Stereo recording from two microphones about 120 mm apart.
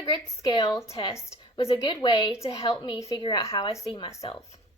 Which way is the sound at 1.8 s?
40° left (ahead or behind).